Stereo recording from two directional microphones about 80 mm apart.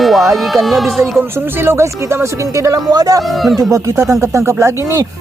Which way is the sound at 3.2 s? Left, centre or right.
Centre.